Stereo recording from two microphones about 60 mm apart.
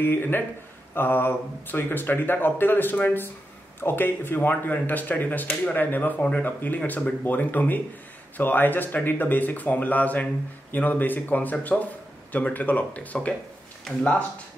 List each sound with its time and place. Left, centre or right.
0.0 s speech: left